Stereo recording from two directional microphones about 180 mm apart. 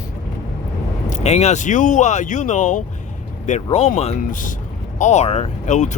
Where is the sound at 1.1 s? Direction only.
35° left (ahead or behind).